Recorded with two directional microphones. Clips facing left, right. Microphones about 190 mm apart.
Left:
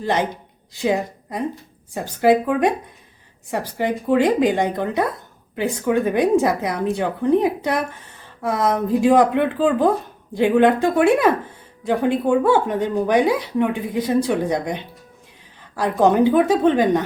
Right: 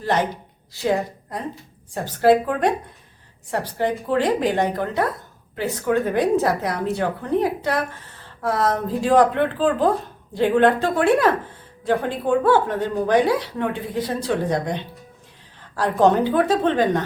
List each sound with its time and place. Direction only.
0.0 s a woman's voice: 15° left (ahead or behind)
3.8 s a woman's voice: 10° left (ahead or behind)